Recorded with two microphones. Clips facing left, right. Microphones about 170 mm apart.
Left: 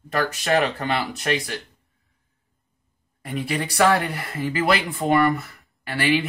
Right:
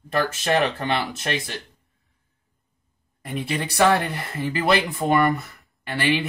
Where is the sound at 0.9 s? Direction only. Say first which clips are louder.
Left 1 dB; 25° right (ahead or behind).